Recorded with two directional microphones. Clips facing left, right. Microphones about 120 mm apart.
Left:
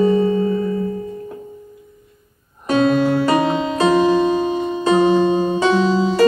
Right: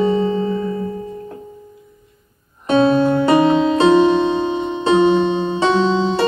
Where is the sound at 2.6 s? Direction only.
25° right (ahead or behind).